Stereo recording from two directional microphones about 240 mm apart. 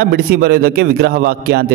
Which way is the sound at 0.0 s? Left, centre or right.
Right.